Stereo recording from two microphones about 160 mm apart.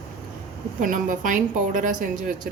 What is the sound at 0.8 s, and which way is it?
A woman's voice, 55° right (ahead or behind).